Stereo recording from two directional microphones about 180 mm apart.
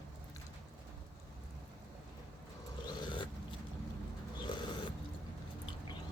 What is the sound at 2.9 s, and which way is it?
Dog, 25° left (ahead or behind).